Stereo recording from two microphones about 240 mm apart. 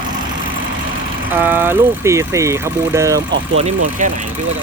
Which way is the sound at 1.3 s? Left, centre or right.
Centre.